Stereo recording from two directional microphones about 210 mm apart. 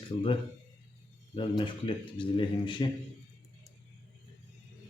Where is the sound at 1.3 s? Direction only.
25° left (ahead or behind).